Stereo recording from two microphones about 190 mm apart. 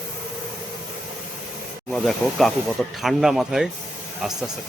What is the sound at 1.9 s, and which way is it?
A man's voice, centre (ahead or behind).